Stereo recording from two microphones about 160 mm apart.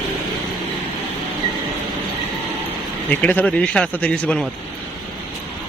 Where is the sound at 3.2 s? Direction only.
10° left (ahead or behind).